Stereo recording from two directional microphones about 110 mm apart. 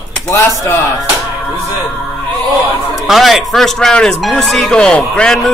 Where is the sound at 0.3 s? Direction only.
25° left (ahead or behind).